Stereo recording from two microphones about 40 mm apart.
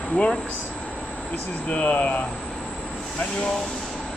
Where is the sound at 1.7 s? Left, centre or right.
Left.